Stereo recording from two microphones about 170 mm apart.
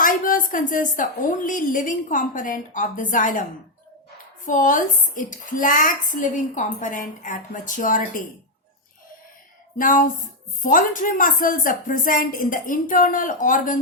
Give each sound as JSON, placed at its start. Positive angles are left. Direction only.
{"t": 0.0, "sound": "a woman's voice", "side_deg": 55}
{"t": 4.4, "sound": "a woman's voice", "side_deg": 50}
{"t": 9.7, "sound": "a woman's voice", "side_deg": 50}